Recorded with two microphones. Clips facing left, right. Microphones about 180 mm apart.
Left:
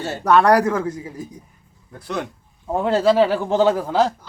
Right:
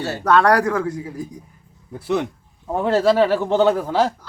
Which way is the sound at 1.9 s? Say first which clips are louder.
Right 6 dB; 5° right (ahead or behind).